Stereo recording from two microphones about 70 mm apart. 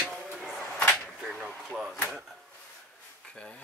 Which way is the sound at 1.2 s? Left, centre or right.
Centre.